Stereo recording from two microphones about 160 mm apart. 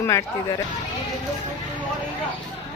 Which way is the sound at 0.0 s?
20° left (ahead or behind).